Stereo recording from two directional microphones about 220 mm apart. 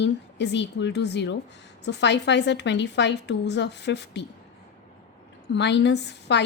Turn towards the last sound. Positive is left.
turn(degrees=50)  # may be behind; listen again after turning